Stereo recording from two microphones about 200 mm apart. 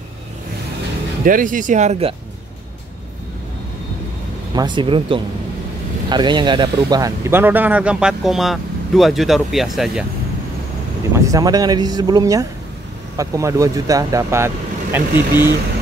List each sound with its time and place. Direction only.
1.2 s speech: 40° right (ahead or behind)
4.6 s speech: 25° right (ahead or behind); by 10.0 s centre (ahead or behind)
11.1 s speech: 15° right (ahead or behind)